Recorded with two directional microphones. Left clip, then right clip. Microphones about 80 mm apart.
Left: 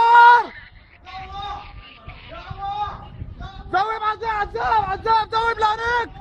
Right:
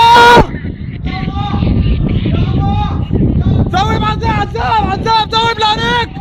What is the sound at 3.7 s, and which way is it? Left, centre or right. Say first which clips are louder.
Vehicle: right 5 dB; centre.